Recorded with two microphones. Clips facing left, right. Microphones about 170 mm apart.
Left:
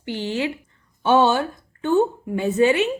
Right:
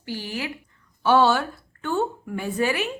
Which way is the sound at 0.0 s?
20° left (ahead or behind).